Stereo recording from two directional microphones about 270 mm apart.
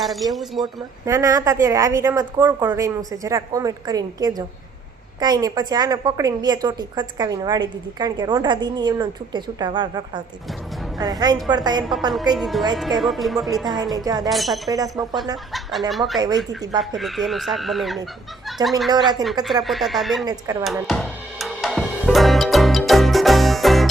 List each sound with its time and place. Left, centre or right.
0.0 s speech: centre
0.6 s a woman's voice: centre
12.4 s speech: centre
13.9 s a woman's voice: centre
14.3 s speech: centre
14.7 s a woman's voice: centre
15.9 s speech: centre
16.1 s a woman's voice: centre
16.9 s speech: centre
18.4 s fowl: centre
18.9 s speech: centre
20.2 s a woman's voice: centre
20.7 s music: centre